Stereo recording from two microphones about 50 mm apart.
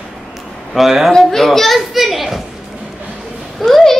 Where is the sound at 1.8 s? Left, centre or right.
Centre.